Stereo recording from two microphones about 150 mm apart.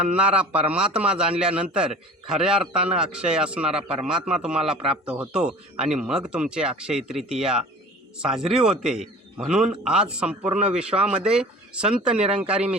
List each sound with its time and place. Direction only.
0.0 s speech: 10° right (ahead or behind)